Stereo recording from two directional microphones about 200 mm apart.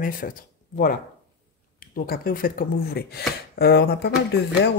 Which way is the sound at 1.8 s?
45° left (ahead or behind).